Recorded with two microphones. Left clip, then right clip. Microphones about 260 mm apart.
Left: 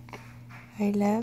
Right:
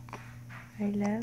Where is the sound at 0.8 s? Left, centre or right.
Left.